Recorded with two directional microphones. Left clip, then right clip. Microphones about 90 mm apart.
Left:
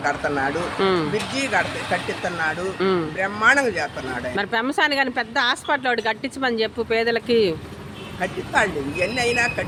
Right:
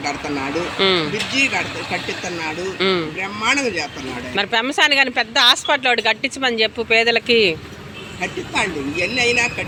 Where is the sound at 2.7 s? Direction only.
40° left (ahead or behind).